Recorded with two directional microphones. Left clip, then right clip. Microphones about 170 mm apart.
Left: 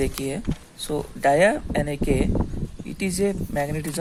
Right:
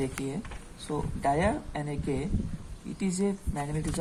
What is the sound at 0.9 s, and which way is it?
Speech, 45° left (ahead or behind).